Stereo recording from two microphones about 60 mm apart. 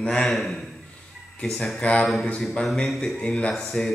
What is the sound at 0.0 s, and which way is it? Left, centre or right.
Speech, centre.